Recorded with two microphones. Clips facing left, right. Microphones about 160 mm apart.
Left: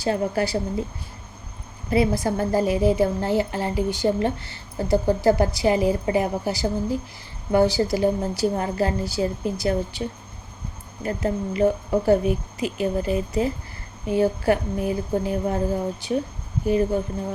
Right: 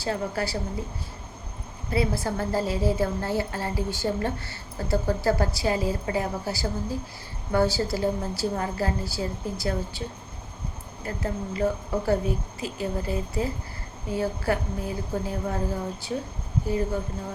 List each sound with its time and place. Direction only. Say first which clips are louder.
0.0 s a woman's voice: left 5 dB; 20° left (ahead or behind)
1.9 s a woman's voice: left 5 dB; 15° left (ahead or behind)
11.0 s a woman's voice: left 6 dB; 20° left (ahead or behind)